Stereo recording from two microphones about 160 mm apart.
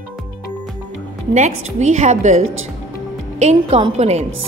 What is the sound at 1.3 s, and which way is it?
A woman's voice, 45° right (ahead or behind).